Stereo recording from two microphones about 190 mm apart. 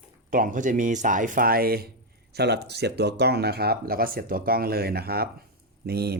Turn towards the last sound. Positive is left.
turn(degrees=-55)  # may be behind; listen again after turning